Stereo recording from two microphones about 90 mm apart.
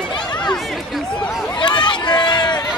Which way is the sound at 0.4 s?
5° left (ahead or behind).